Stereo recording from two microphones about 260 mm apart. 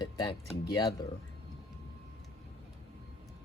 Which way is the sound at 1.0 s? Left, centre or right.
Centre.